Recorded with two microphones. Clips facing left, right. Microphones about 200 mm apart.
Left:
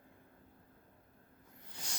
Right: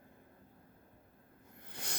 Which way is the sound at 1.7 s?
60° right (ahead or behind).